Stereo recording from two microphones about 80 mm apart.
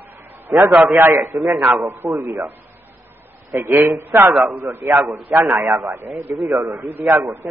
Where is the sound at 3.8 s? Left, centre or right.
Right.